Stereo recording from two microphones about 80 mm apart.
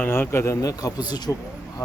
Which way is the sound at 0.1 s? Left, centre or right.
Left.